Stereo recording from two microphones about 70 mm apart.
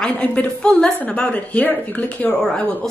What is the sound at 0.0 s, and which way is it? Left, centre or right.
Speech, centre.